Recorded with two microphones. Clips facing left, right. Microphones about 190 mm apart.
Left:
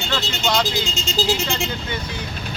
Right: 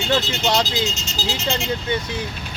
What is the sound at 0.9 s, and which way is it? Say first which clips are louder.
Speech: left 6 dB; 30° left (ahead or behind).